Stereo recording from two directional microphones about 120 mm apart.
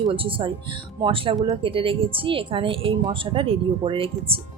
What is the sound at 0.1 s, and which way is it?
Speech, 50° right (ahead or behind).